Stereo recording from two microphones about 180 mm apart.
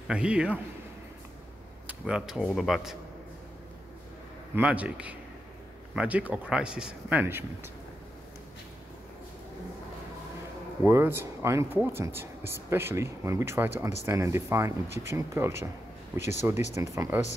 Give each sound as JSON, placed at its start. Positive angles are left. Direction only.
{"t": 0.1, "sound": "speech", "side_deg": -5}
{"t": 1.9, "sound": "speech", "side_deg": -5}
{"t": 4.6, "sound": "speech", "side_deg": -5}
{"t": 10.8, "sound": "speech", "side_deg": -15}